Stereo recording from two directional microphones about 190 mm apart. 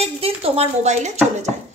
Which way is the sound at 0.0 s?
30° right (ahead or behind).